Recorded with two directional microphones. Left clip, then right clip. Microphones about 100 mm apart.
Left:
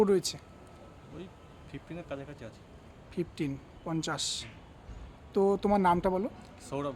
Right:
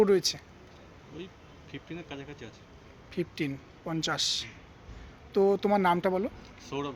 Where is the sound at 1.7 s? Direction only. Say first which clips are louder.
Even; 35° left (ahead or behind).